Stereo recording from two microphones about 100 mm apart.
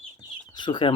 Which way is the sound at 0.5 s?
50° left (ahead or behind).